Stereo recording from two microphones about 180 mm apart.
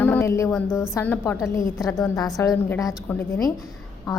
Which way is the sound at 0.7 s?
15° left (ahead or behind).